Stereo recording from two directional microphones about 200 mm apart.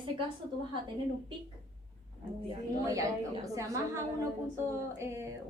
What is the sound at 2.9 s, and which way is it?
Speech, 15° right (ahead or behind).